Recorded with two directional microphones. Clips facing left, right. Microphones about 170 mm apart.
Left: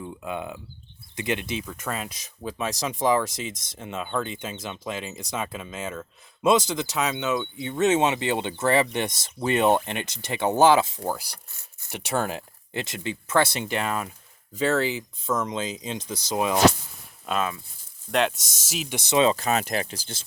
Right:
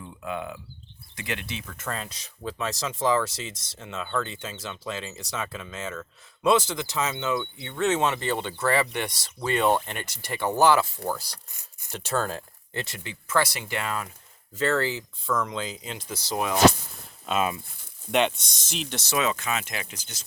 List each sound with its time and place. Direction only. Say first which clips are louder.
0.2 s speech: right 2 dB; 20° left (ahead or behind)
3.5 s speech: left 4 dB; 50° left (ahead or behind)
3.8 s speech: left 1 dB; 15° left (ahead or behind)
18.1 s speech: even; centre (ahead or behind)
19.1 s speech: left 6 dB; 30° left (ahead or behind)